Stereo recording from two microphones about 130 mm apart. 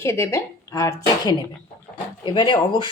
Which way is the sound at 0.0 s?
20° left (ahead or behind).